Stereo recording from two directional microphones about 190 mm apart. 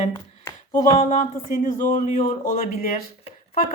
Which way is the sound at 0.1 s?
20° left (ahead or behind).